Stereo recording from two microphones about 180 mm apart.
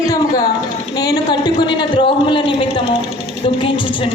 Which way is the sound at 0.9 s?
20° left (ahead or behind).